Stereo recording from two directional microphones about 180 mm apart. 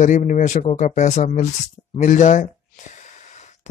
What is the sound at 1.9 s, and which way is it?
Gasp, 40° left (ahead or behind).